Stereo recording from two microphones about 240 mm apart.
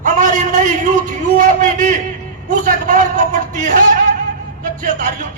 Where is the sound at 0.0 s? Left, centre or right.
Right.